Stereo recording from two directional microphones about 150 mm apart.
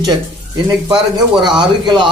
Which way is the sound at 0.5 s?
30° right (ahead or behind).